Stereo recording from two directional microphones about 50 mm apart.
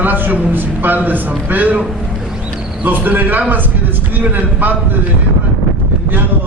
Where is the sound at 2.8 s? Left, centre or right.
Right.